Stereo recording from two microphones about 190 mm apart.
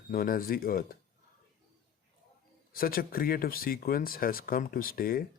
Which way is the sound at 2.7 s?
50° left (ahead or behind).